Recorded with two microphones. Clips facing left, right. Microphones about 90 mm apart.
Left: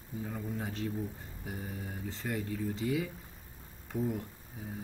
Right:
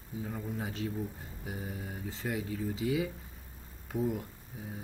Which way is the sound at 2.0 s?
5° right (ahead or behind).